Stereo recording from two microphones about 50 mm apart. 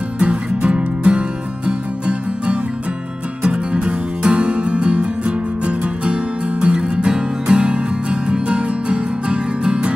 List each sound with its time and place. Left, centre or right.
0.2 s music: right